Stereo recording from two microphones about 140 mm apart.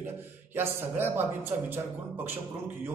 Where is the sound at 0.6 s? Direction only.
15° right (ahead or behind).